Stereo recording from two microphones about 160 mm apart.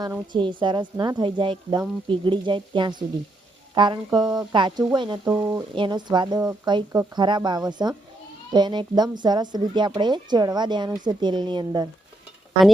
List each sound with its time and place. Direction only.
0.3 s a woman's voice: 30° right (ahead or behind)
5.3 s speech: 15° right (ahead or behind)
5.7 s a woman's voice: 30° right (ahead or behind)